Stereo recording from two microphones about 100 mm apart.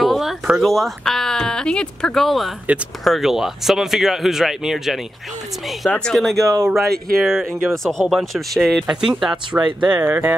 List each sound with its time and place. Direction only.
0.0 s a sound: centre (ahead or behind)
0.6 s speech: centre (ahead or behind)
5.9 s speech: 10° left (ahead or behind)
6.1 s speech: centre (ahead or behind)
6.4 s speech: 35° right (ahead or behind)
6.7 s speech: centre (ahead or behind); by 10.3 s 20° right (ahead or behind)